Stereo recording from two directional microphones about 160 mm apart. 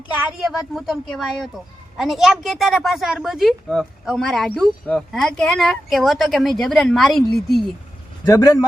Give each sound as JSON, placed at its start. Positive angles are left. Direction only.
{"t": 0.3, "sound": "speech", "side_deg": -5}
{"t": 8.3, "sound": "a man's voice", "side_deg": 20}